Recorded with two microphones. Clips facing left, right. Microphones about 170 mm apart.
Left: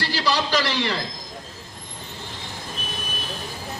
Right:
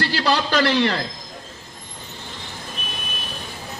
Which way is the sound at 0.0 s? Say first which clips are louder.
Right 3 dB; 60° right (ahead or behind).